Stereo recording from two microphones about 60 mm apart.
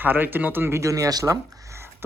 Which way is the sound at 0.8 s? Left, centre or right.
Right.